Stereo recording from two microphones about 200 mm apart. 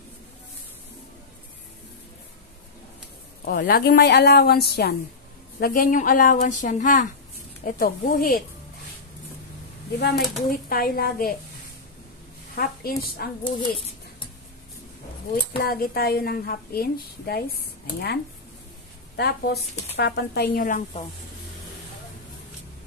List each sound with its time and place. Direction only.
3.4 s a woman's voice: 50° left (ahead or behind)
10.5 s a woman's voice: 45° left (ahead or behind)
12.5 s a woman's voice: 50° left (ahead or behind)
13.4 s speech: 25° left (ahead or behind)
15.5 s a woman's voice: 50° left (ahead or behind)
20.5 s speech: 40° left (ahead or behind)